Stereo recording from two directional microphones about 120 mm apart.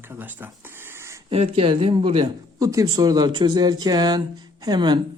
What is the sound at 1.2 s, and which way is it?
Speech, 55° right (ahead or behind).